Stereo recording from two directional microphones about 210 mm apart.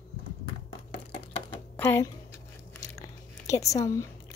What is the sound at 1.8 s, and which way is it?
Speech, 10° left (ahead or behind).